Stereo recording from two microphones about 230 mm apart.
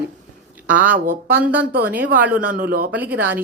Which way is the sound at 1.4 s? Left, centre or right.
Centre.